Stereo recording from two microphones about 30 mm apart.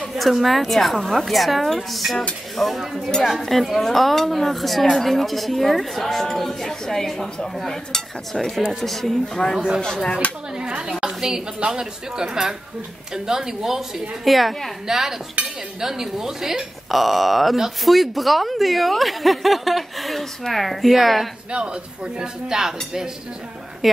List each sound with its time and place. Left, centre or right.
0.3 s speech: centre
2.5 s stir: centre
2.8 s speech: centre
9.1 s speech: left
10.2 s a sound: left
10.9 s a sound: right
11.1 s a woman's voice: centre
14.2 s speech: centre
14.9 s speech: centre
15.4 s dishes: right
15.8 s speech: centre
16.9 s speech: centre
21.5 s speech: right
22.5 s speech: centre